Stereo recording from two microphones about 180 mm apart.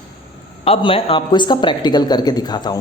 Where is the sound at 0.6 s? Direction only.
30° left (ahead or behind).